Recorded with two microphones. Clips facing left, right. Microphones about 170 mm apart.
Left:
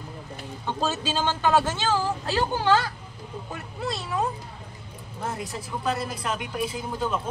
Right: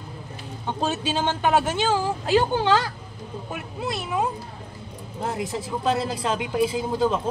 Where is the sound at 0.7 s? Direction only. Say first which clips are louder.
Right 2 dB; 15° right (ahead or behind).